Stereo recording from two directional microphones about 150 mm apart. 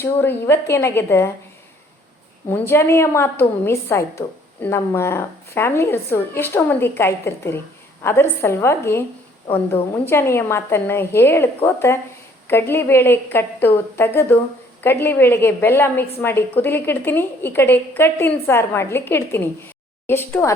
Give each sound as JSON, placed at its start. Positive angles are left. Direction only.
{"t": 0.0, "sound": "a woman's voice", "side_deg": 15}
{"t": 2.5, "sound": "a woman's voice", "side_deg": 15}